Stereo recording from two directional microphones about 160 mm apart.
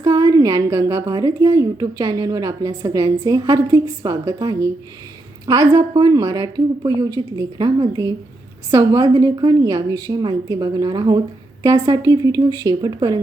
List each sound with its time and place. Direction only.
0.0 s a woman's voice: 20° right (ahead or behind)
8.7 s a woman's voice: 25° right (ahead or behind)